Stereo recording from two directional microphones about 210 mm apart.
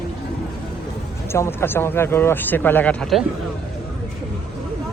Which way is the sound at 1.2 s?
10° left (ahead or behind).